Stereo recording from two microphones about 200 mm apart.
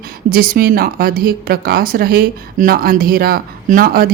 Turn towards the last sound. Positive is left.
turn(degrees=-45)  # may be behind; listen again after turning